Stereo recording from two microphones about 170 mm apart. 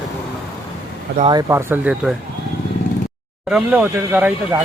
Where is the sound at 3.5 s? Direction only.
10° right (ahead or behind).